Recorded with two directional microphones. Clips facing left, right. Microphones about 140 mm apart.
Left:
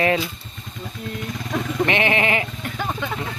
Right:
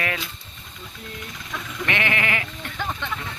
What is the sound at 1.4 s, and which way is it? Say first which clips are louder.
Vehicle: left 12 dB; 50° left (ahead or behind).